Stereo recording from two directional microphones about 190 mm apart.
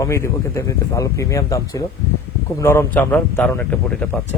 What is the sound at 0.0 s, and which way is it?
A man's voice, 15° left (ahead or behind).